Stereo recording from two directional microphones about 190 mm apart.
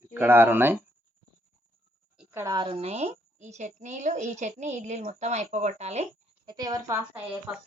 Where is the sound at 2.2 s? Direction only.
15° right (ahead or behind); by 6.1 s 35° right (ahead or behind).